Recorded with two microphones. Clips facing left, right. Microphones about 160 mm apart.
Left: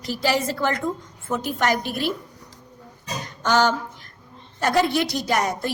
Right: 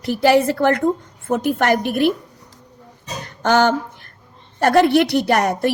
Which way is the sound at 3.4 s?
55° right (ahead or behind).